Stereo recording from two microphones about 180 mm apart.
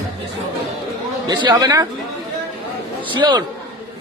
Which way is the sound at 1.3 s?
20° right (ahead or behind).